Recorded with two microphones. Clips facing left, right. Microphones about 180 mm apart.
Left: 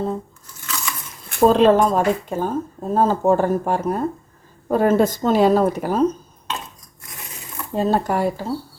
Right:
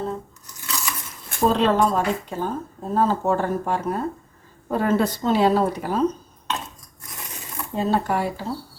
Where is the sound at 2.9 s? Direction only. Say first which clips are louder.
Left 4 dB; 45° left (ahead or behind).